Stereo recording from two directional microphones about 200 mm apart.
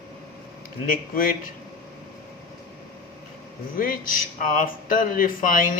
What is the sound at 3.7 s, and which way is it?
Speech, 45° left (ahead or behind).